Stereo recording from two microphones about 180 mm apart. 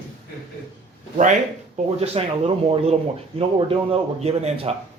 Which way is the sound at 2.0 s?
35° right (ahead or behind).